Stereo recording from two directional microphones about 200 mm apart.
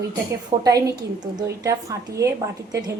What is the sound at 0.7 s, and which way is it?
A woman's voice, 15° right (ahead or behind).